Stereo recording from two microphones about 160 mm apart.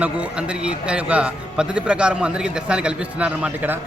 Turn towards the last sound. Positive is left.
turn(degrees=-10)  # may be behind; listen again after turning